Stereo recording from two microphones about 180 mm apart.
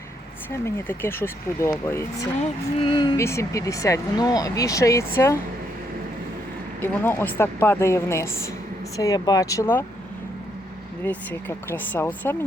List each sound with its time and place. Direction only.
0.6 s speech: 15° left (ahead or behind)
6.8 s speech: 10° left (ahead or behind)
11.0 s speech: 10° left (ahead or behind)